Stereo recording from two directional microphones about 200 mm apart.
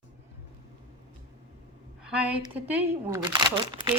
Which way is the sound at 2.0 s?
5° right (ahead or behind).